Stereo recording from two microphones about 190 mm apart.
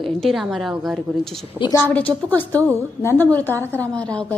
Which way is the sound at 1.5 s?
25° left (ahead or behind).